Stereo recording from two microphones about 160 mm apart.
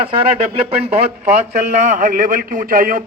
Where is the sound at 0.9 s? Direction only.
40° right (ahead or behind).